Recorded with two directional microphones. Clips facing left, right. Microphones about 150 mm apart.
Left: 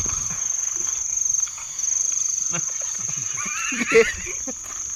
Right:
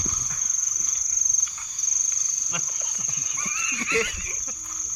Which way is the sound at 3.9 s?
75° left (ahead or behind).